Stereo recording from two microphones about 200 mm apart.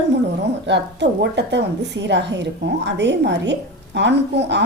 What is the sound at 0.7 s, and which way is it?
A woman's voice, 60° right (ahead or behind).